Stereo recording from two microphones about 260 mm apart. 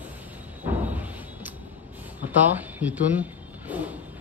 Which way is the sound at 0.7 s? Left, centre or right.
Centre.